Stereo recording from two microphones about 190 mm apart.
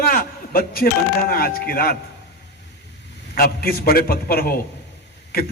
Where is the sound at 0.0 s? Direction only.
50° left (ahead or behind).